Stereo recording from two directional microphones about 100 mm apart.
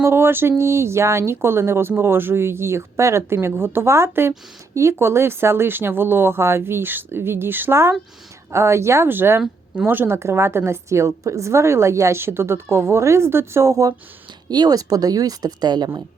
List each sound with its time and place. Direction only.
0.0 s speech: 25° right (ahead or behind)
14.5 s speech: 40° right (ahead or behind)